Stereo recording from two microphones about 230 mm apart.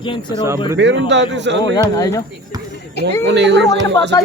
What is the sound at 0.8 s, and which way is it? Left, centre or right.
Speech, right.